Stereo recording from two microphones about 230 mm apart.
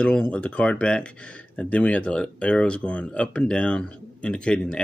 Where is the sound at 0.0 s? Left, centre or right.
Centre.